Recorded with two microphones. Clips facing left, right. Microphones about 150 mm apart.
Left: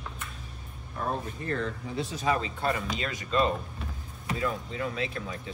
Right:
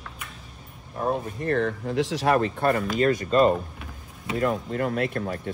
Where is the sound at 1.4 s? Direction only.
65° right (ahead or behind).